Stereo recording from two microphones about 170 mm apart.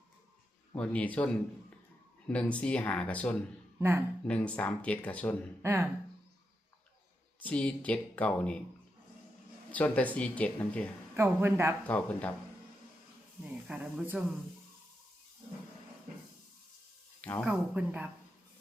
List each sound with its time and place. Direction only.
0.8 s speech: 10° left (ahead or behind)
3.8 s speech: 15° right (ahead or behind)
4.3 s speech: 5° left (ahead or behind)
5.6 s speech: 15° right (ahead or behind)
7.4 s speech: 5° left (ahead or behind)
9.7 s speech: 10° left (ahead or behind)
11.2 s speech: 10° right (ahead or behind)
11.8 s speech: 10° left (ahead or behind)
13.4 s speech: 10° right (ahead or behind)
17.2 s speech: 10° left (ahead or behind)
17.4 s speech: 10° right (ahead or behind)